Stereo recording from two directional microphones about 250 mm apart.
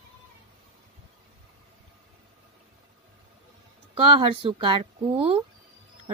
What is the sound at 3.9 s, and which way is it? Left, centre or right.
A woman's voice, right.